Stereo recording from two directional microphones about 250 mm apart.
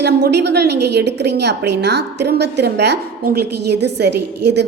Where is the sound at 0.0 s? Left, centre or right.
Right.